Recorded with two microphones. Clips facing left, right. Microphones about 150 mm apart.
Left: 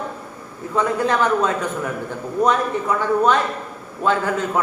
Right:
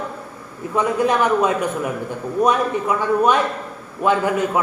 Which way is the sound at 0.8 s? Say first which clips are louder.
Right 1 dB; 15° right (ahead or behind).